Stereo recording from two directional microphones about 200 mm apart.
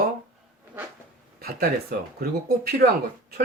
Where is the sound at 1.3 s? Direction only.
45° right (ahead or behind).